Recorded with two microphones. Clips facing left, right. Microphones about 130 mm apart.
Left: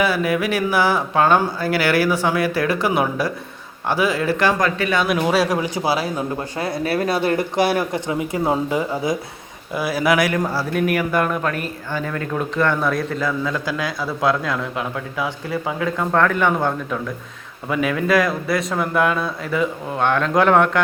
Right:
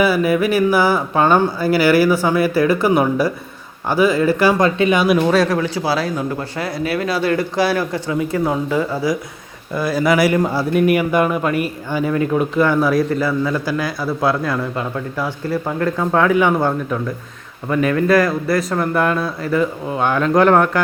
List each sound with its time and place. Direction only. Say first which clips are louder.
0.0 s a man's voice: right 4 dB; centre (ahead or behind)
4.6 s speech: right 5 dB; 20° right (ahead or behind)
5.1 s speech: right 3 dB; 10° left (ahead or behind)
6.6 s speech: even; 30° left (ahead or behind)
9.7 s a man's voice: right 2 dB; 5° left (ahead or behind)
16.1 s speech: right 3 dB; 10° right (ahead or behind)
17.7 s a man's voice: right 4 dB; 5° left (ahead or behind)